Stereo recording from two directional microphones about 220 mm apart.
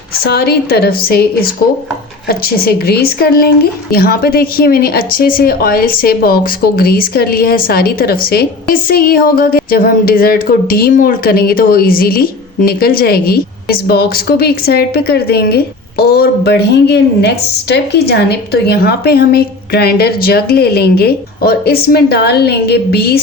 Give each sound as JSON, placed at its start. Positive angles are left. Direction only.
{"t": 0.3, "sound": "speech", "side_deg": 45}